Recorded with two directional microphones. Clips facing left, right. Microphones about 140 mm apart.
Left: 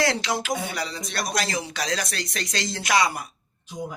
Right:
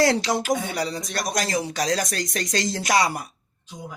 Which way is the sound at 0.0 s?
40° right (ahead or behind).